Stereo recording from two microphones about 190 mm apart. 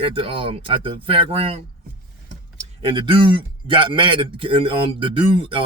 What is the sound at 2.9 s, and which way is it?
Speech, 25° right (ahead or behind).